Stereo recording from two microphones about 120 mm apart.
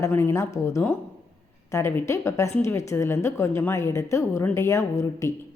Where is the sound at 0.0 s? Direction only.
20° left (ahead or behind).